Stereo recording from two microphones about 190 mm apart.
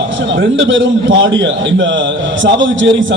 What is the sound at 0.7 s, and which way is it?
Speech, 85° right.